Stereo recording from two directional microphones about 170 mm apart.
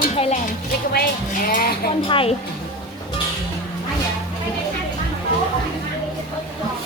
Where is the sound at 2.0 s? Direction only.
30° left (ahead or behind).